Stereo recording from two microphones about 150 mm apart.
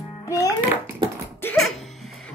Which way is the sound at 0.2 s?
20° left (ahead or behind).